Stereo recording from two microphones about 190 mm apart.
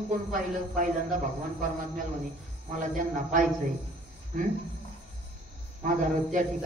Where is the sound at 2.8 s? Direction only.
45° right (ahead or behind).